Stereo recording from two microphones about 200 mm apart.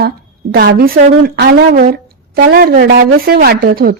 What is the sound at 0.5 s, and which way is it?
A woman's voice, 50° right (ahead or behind).